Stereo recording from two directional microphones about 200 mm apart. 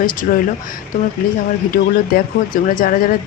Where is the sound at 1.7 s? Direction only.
40° left (ahead or behind).